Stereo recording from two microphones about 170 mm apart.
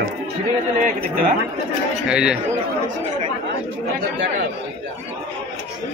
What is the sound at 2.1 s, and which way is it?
Speech, 5° right (ahead or behind).